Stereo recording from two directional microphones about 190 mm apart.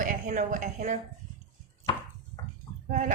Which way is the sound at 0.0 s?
40° right (ahead or behind).